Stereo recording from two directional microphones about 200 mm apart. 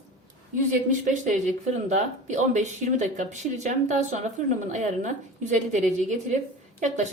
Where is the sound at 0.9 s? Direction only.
40° right (ahead or behind).